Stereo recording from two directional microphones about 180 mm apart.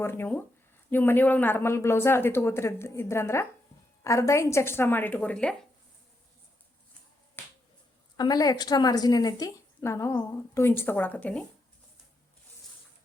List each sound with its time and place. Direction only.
0.0 s a woman's voice: 10° left (ahead or behind)
7.4 s finger snapping: 10° left (ahead or behind)
8.1 s a woman's voice: 20° left (ahead or behind)